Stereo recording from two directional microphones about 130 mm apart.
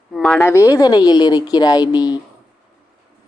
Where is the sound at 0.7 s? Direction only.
30° left (ahead or behind).